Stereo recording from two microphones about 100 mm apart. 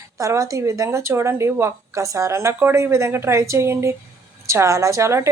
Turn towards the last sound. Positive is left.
turn(degrees=-30)  # may be behind; listen again after turning